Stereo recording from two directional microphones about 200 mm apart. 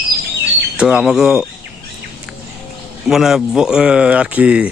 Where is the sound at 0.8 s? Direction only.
5° right (ahead or behind).